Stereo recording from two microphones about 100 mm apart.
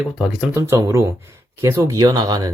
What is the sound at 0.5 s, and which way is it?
Speech, 30° right (ahead or behind).